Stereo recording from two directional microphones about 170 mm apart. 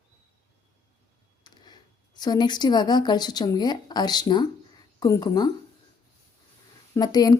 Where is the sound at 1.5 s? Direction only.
25° left (ahead or behind).